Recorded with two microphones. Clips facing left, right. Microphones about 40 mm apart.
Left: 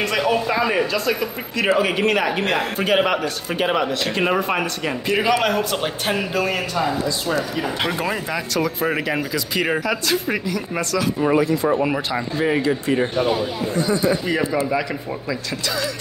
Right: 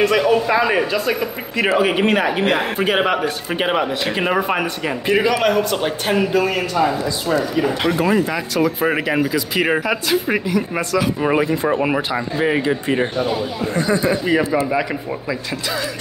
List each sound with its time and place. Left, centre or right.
0.0 s a man's voice: centre
0.7 s a man's voice: centre
7.8 s speech: centre